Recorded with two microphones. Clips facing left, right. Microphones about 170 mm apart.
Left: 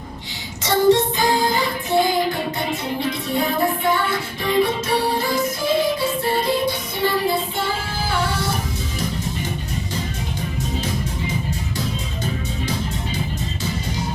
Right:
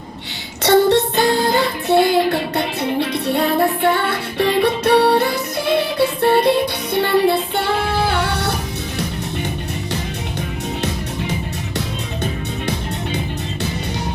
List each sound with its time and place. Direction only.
0.6 s music: 65° right (ahead or behind)